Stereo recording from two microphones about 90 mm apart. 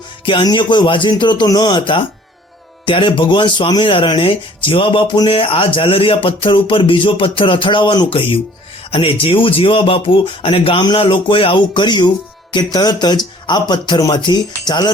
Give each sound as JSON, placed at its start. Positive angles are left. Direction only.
{"t": 0.4, "sound": "speech", "side_deg": 55}
{"t": 6.2, "sound": "speech", "side_deg": 70}